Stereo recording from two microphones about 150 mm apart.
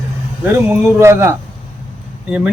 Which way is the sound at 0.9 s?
20° right (ahead or behind).